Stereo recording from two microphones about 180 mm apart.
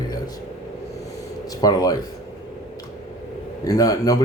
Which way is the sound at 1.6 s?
20° left (ahead or behind).